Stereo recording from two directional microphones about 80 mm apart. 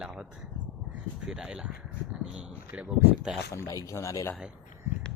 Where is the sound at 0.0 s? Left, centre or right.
Centre.